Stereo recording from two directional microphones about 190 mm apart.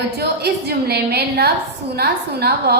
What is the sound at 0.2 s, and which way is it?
A woman's voice, 55° right (ahead or behind).